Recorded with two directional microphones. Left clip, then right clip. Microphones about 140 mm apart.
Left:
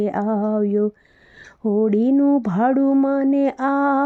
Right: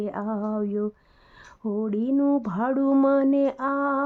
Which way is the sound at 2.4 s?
30° left (ahead or behind).